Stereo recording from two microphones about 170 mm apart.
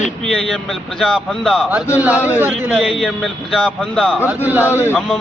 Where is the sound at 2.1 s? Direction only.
15° left (ahead or behind).